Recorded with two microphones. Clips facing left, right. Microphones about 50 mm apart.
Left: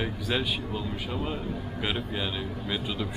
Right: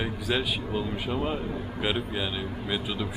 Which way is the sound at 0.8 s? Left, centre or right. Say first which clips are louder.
Right 3 dB; centre.